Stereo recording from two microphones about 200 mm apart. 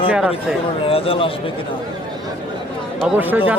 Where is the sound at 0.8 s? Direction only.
30° left (ahead or behind).